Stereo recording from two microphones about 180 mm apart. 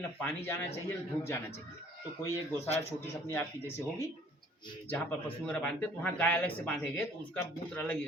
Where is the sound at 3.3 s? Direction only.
15° left (ahead or behind).